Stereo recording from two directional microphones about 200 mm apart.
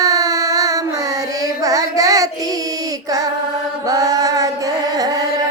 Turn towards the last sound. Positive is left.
turn(degrees=-15)  # may be behind; listen again after turning